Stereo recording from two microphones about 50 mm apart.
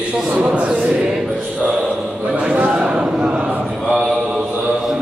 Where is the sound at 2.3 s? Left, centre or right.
Right.